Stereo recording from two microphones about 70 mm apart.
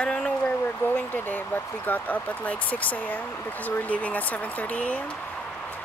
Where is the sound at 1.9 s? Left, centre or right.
Left.